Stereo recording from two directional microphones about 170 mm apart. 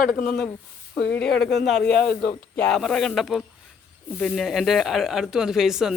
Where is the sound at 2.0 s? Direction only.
65° left (ahead or behind).